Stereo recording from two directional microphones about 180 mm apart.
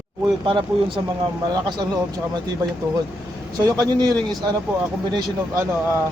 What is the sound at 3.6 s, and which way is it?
A man's voice, 20° right (ahead or behind).